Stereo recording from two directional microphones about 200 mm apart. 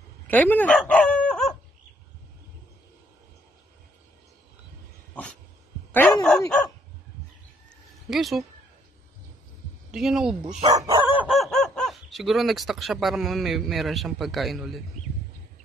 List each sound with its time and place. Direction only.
0.3 s dog: 10° left (ahead or behind)
5.9 s dog: 10° left (ahead or behind)
8.1 s speech: centre (ahead or behind)
9.8 s speech: centre (ahead or behind)
10.7 s chicken: 20° right (ahead or behind)
11.1 s speech: centre (ahead or behind)